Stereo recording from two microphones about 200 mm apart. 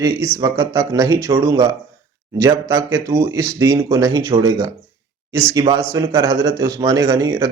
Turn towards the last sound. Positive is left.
turn(degrees=-15)  # may be behind; listen again after turning